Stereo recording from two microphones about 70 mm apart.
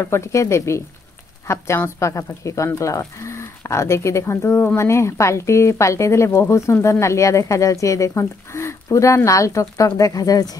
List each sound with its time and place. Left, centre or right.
0.0 s a woman's voice: left